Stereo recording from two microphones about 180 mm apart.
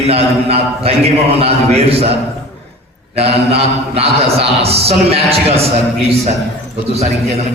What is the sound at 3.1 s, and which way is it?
A man's voice, 35° right (ahead or behind).